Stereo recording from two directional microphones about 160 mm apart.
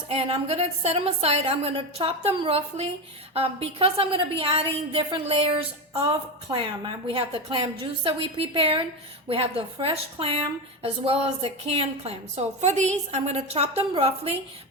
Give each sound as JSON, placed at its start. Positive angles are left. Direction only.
{"t": 0.1, "sound": "a woman's voice", "side_deg": -40}